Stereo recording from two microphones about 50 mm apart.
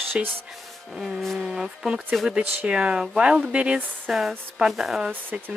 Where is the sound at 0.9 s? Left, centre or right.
Centre.